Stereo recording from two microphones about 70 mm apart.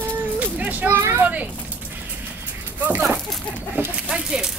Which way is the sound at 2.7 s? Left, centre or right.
Right.